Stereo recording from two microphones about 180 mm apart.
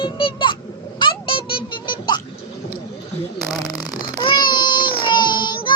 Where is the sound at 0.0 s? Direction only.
30° left (ahead or behind).